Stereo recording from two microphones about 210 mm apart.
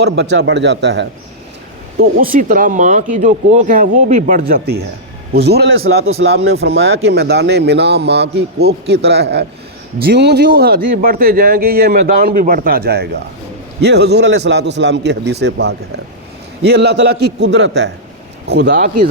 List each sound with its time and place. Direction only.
0.0 s a man's voice: 55° right (ahead or behind)
2.0 s speech: 40° right (ahead or behind)